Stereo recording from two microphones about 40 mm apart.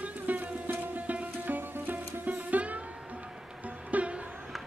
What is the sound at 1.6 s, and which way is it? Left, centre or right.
Sitar, right.